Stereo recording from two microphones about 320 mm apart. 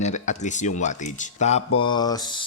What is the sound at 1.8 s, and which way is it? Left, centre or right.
Mantra, centre.